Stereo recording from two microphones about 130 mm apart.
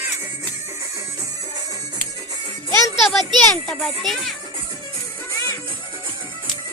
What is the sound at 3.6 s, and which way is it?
Speech, 5° left (ahead or behind).